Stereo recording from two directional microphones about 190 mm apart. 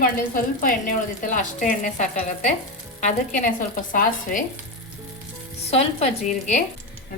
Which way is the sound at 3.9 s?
45° left (ahead or behind).